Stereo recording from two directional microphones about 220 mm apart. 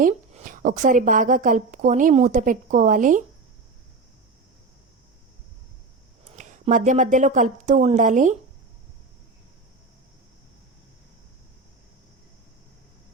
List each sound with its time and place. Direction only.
0.0 s a woman's voice: 35° right (ahead or behind)
6.2 s speech: 35° right (ahead or behind)